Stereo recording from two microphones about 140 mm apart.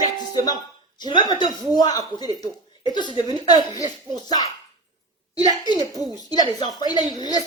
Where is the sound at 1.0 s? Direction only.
35° left (ahead or behind).